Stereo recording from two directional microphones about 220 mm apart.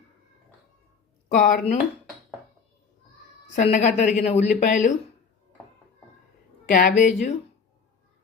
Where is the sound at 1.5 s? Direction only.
35° left (ahead or behind).